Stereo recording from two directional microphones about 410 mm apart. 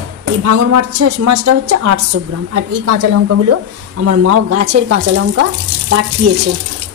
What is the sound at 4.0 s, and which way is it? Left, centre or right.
A woman's voice, right.